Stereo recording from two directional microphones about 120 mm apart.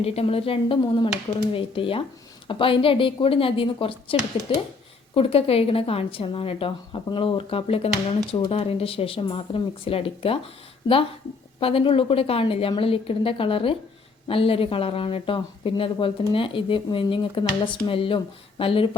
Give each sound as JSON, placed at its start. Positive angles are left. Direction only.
{"t": 0.0, "sound": "speech", "side_deg": 55}